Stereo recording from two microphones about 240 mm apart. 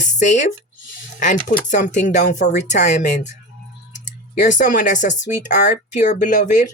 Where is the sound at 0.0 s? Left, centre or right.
Left.